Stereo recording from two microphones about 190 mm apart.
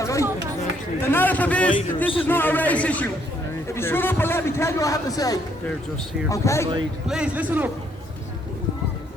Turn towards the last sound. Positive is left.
turn(degrees=-10)  # may be behind; listen again after turning